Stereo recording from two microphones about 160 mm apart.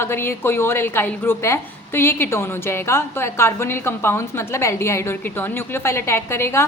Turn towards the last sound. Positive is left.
turn(degrees=15)  # may be behind; listen again after turning